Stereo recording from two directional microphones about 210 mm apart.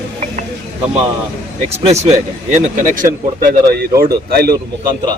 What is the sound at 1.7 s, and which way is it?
Speech, 30° right (ahead or behind).